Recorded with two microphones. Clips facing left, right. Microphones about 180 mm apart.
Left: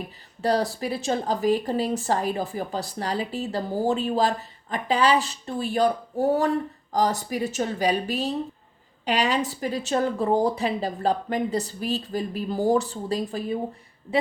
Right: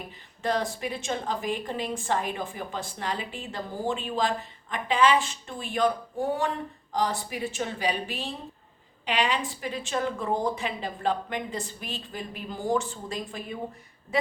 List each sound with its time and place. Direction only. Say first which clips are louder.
0.4 s speech: left 4 dB; 35° left (ahead or behind)